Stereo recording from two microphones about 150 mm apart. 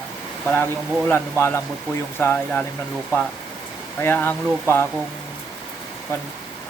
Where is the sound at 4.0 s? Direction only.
15° left (ahead or behind).